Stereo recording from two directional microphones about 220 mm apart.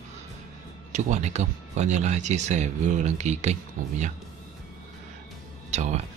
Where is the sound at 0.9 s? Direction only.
35° right (ahead or behind).